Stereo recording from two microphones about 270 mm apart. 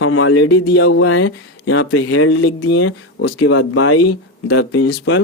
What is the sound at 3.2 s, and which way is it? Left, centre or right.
Speech, left.